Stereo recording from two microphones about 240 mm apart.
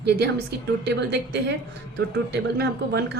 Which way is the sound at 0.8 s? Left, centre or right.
Right.